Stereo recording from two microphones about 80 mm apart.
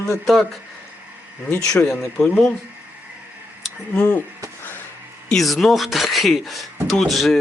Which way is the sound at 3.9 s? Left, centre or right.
Left.